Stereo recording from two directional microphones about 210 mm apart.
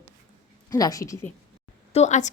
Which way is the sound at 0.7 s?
15° left (ahead or behind).